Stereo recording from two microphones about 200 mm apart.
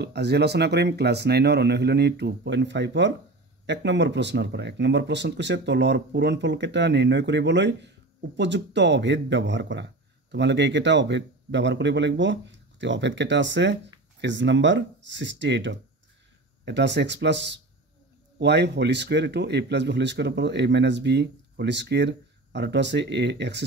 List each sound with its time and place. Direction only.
0.0 s speech: 55° right (ahead or behind)